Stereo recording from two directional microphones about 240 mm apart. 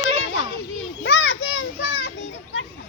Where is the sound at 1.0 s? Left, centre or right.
Left.